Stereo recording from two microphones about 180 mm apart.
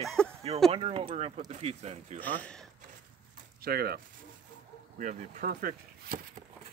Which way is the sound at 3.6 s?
55° right (ahead or behind).